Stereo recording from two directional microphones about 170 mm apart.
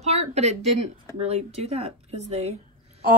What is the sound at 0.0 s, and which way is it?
Speech, 40° right (ahead or behind).